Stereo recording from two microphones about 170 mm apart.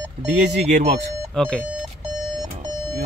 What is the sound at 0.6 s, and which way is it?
Speech, 40° right (ahead or behind).